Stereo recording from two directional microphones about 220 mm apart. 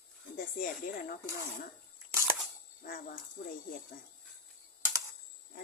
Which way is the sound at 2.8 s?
40° left (ahead or behind).